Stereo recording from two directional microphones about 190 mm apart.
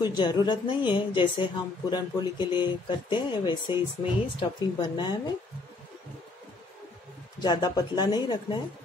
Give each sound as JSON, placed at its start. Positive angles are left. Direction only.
{"t": 0.0, "sound": "a woman's voice", "side_deg": 25}
{"t": 7.3, "sound": "a woman's voice", "side_deg": 20}